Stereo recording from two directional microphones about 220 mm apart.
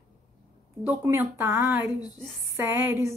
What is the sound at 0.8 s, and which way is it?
Speech, 10° right (ahead or behind).